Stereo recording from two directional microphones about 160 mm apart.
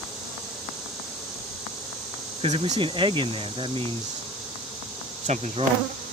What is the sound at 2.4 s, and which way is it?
Speech, 45° right (ahead or behind).